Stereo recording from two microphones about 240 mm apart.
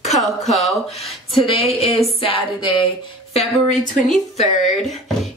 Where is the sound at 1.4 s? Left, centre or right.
Left.